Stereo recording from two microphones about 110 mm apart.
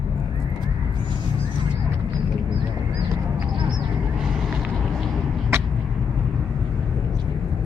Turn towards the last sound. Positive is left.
turn(degrees=-20)  # may be behind; listen again after turning